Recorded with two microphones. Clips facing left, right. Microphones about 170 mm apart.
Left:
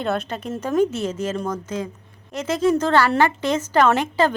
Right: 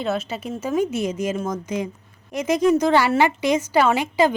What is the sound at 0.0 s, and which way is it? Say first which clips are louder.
Speech: even; 5° right (ahead or behind).